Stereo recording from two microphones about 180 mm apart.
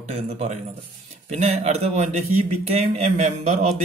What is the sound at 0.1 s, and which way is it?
Speech, 40° right (ahead or behind).